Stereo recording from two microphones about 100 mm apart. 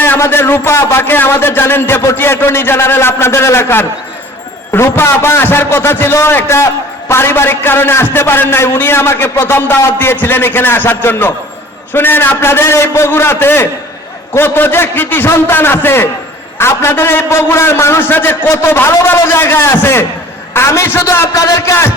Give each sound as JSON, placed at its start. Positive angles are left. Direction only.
{"t": 0.0, "sound": "a man's voice", "side_deg": 20}